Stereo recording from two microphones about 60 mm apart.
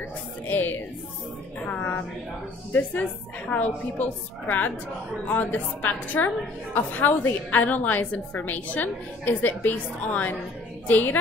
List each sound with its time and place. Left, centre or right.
0.5 s a woman's voice: left
2.7 s a woman's voice: left